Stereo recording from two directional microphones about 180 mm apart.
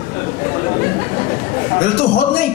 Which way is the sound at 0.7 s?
45° left (ahead or behind).